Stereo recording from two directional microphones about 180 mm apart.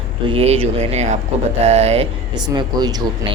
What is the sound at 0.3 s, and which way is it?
Speech, 35° right (ahead or behind).